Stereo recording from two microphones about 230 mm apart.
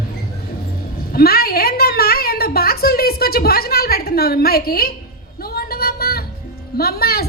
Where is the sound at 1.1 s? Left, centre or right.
Left.